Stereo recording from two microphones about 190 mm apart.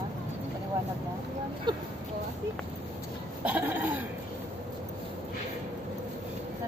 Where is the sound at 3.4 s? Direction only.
10° right (ahead or behind).